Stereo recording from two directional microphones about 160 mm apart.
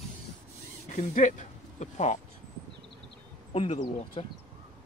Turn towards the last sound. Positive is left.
turn(degrees=40)  # may be behind; listen again after turning